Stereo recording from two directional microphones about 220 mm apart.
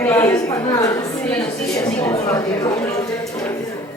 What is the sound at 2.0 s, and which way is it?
Speech, 15° left (ahead or behind).